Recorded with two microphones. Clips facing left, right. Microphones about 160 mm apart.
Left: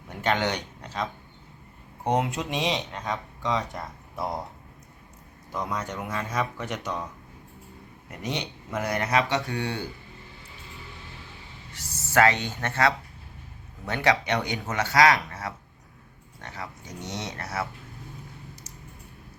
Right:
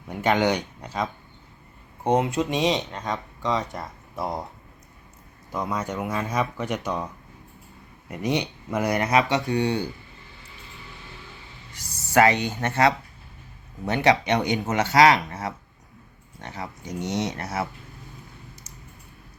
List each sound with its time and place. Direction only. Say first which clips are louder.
0.1 s speech: right 5 dB; 10° right (ahead or behind)
2.0 s speech: right 4 dB; centre (ahead or behind)
5.5 s speech: right 3 dB; 5° right (ahead or behind)
8.2 s speech: right 7 dB; 15° right (ahead or behind)
11.7 s speech: right 3 dB; 15° right (ahead or behind)